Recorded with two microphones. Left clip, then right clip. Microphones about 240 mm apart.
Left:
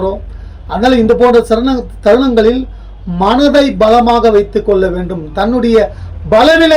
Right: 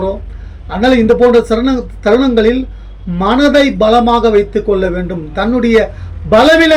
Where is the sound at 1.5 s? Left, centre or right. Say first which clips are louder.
Left 1 dB; centre.